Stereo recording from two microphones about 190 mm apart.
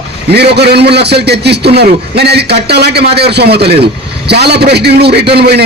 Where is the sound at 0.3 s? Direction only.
60° right (ahead or behind).